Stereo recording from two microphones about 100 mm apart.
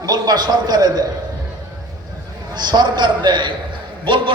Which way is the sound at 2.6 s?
45° right (ahead or behind).